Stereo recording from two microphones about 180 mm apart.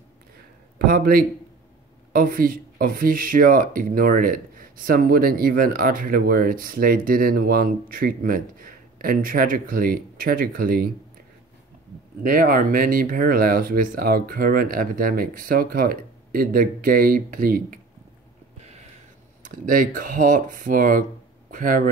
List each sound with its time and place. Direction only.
0.8 s speech: 55° right (ahead or behind)
12.2 s speech: 55° right (ahead or behind)
19.4 s speech: 50° right (ahead or behind)